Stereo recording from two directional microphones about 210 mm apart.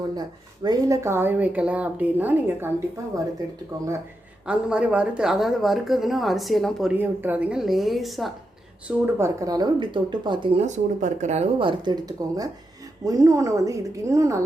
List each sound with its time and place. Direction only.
0.2 s speech: 20° right (ahead or behind)
4.4 s speech: 5° right (ahead or behind)
8.9 s speech: 10° right (ahead or behind); by 11.7 s 30° right (ahead or behind)
11.9 s speech: 15° right (ahead or behind)